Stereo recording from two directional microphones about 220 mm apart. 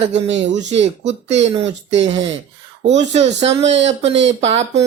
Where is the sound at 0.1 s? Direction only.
30° right (ahead or behind).